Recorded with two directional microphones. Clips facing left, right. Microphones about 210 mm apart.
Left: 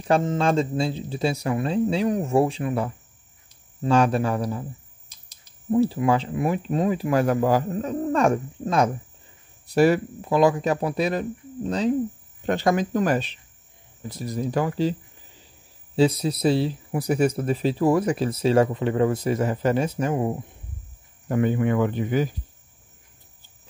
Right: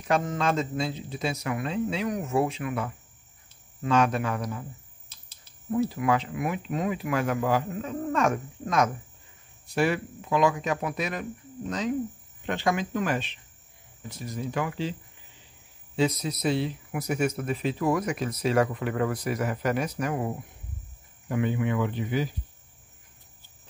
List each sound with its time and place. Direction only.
0.1 s speech: 30° left (ahead or behind)
5.7 s speech: 30° left (ahead or behind)
16.0 s speech: 30° left (ahead or behind)
21.3 s speech: 45° left (ahead or behind)